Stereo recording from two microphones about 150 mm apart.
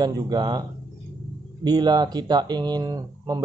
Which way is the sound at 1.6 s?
30° right (ahead or behind).